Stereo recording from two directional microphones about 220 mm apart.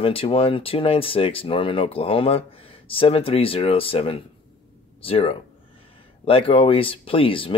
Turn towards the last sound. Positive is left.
turn(degrees=25)  # may be behind; listen again after turning